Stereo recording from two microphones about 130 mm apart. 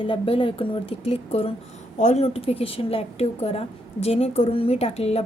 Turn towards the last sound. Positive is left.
turn(degrees=50)  # may be behind; listen again after turning